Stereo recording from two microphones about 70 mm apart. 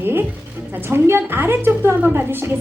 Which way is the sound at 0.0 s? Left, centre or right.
Right.